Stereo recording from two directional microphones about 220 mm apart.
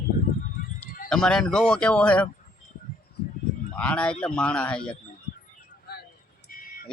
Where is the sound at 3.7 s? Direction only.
5° left (ahead or behind).